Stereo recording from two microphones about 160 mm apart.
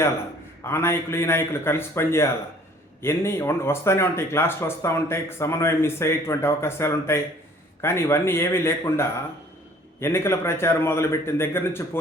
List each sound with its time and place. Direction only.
0.6 s speech: 15° left (ahead or behind)